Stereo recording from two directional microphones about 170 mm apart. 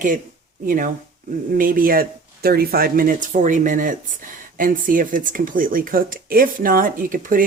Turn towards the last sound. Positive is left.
turn(degrees=-55)  # may be behind; listen again after turning